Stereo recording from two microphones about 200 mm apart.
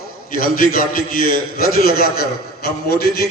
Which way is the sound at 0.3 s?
45° left (ahead or behind).